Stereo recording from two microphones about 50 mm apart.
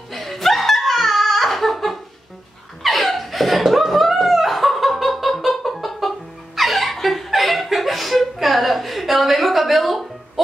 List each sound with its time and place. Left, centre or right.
0.1 s laughter: centre
2.8 s chuckle: centre